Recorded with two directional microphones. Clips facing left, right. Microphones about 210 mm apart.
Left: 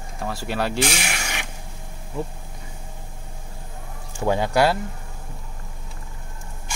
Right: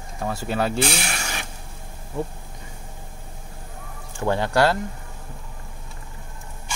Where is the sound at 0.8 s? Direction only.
15° left (ahead or behind).